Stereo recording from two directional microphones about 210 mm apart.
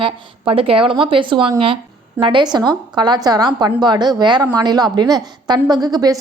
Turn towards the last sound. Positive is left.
turn(degrees=-20)  # may be behind; listen again after turning